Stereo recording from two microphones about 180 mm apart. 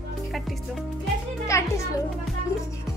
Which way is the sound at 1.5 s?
15° left (ahead or behind).